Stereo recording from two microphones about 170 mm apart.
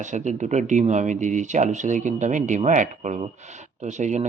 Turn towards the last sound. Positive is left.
turn(degrees=-45)  # may be behind; listen again after turning